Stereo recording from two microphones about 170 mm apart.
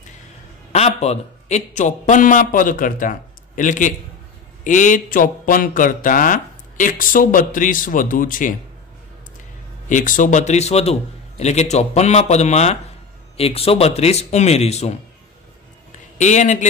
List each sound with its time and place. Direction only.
0.7 s speech: 40° left (ahead or behind)
9.8 s a man's voice: 50° left (ahead or behind)
16.2 s speech: 45° left (ahead or behind)